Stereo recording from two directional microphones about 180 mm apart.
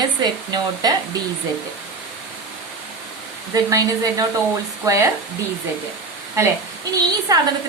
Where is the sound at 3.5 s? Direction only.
20° right (ahead or behind).